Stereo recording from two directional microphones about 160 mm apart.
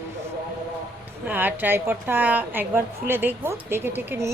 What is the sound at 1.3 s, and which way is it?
A woman's voice, 10° right (ahead or behind).